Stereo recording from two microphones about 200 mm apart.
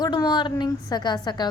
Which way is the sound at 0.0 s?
20° left (ahead or behind).